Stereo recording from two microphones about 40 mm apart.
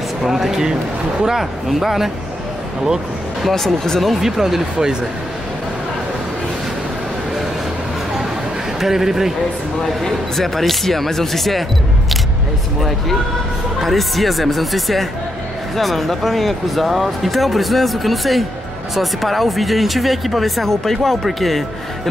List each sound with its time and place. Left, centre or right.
0.2 s a man's voice: centre
3.4 s speech: centre
4.1 s a man's voice: centre
8.7 s a man's voice: centre
10.0 s speech: centre
13.7 s speech: centre